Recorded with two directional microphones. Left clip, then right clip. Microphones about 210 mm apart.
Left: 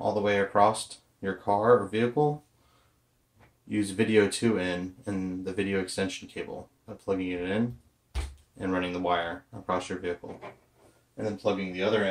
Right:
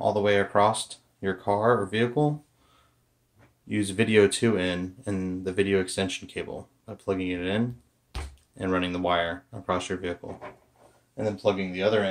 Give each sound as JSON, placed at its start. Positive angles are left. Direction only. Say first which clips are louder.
{"t": 0.0, "sound": "speech", "louder": "right 3 dB", "side_deg": -35}
{"t": 3.6, "sound": "speech", "louder": "right 2 dB", "side_deg": -35}
{"t": 11.1, "sound": "speech", "louder": "right 3 dB", "side_deg": -45}